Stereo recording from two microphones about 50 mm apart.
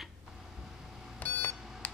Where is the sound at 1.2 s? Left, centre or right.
Left.